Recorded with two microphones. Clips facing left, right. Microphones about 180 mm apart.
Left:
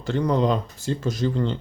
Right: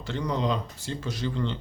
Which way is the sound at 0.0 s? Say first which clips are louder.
Left 7 dB; 50° left (ahead or behind).